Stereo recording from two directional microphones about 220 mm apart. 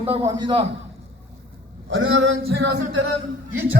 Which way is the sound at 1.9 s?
60° right (ahead or behind).